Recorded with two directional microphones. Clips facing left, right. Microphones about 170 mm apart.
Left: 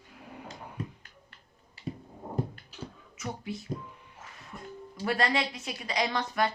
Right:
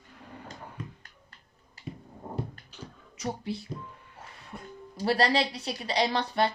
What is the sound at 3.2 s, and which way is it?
Speech, 30° right (ahead or behind).